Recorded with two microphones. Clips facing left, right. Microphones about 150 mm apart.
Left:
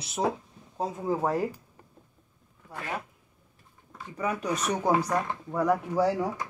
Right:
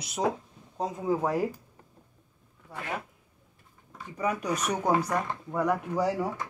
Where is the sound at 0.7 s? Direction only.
5° left (ahead or behind).